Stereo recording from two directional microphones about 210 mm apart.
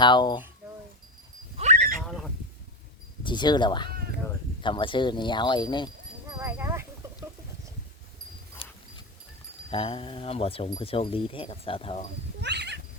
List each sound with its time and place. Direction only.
0.0 s speech: 20° left (ahead or behind)
1.5 s a sound: 35° right (ahead or behind)
2.0 s fowl: centre (ahead or behind)
3.2 s speech: 20° left (ahead or behind)
6.3 s a sound: 10° right (ahead or behind)
9.6 s speech: 25° left (ahead or behind)
12.4 s cat: 55° right (ahead or behind)